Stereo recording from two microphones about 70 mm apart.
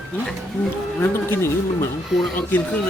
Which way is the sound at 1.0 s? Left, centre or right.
Left.